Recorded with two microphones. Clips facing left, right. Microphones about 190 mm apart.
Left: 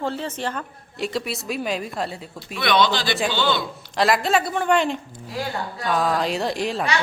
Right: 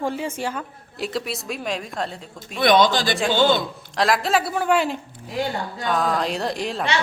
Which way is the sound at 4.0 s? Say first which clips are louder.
Left 1 dB; centre (ahead or behind).